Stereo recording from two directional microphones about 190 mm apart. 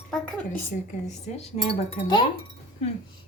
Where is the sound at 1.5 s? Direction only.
35° left (ahead or behind).